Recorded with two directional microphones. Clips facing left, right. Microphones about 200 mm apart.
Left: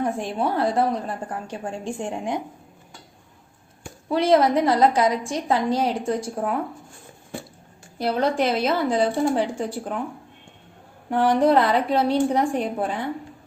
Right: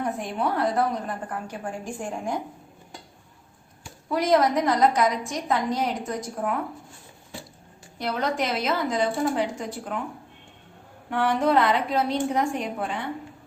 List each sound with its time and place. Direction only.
0.0 s a woman's voice: 30° left (ahead or behind)
4.1 s a woman's voice: 30° left (ahead or behind)
7.9 s a woman's voice: 30° left (ahead or behind)
11.1 s a woman's voice: 35° left (ahead or behind)